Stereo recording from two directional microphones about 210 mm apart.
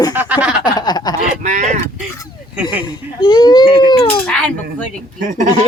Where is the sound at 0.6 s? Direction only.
20° left (ahead or behind).